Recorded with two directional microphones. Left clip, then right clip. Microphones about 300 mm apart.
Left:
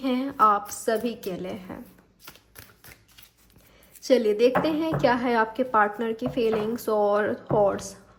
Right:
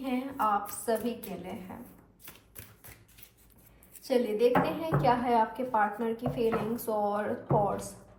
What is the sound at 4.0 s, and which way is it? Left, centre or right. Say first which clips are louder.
A woman's voice: left 6 dB; left.